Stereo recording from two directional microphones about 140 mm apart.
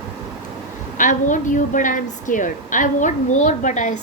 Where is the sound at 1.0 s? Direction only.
65° left (ahead or behind).